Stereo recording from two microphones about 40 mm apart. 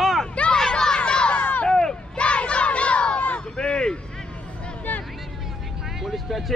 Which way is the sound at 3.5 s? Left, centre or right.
Left.